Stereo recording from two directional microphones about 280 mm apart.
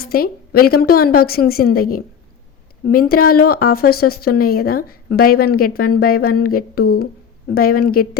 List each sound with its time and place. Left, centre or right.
0.0 s speech: left